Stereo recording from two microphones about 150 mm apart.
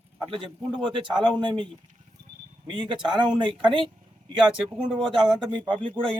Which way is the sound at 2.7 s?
30° right (ahead or behind).